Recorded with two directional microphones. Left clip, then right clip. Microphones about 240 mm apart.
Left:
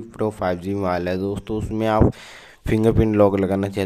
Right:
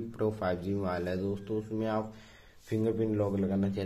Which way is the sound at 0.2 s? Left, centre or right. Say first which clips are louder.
Left 9 dB; left.